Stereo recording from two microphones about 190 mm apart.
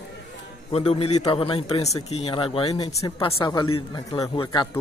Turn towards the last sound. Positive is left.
turn(degrees=25)  # may be behind; listen again after turning